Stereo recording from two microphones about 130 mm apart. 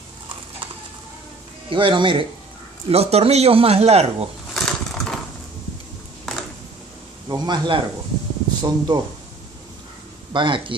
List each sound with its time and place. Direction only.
1.7 s speech: 40° right (ahead or behind)
2.9 s speech: 50° right (ahead or behind)
4.6 s a sound: 5° left (ahead or behind)
7.2 s speech: 35° right (ahead or behind)
10.3 s speech: 40° right (ahead or behind)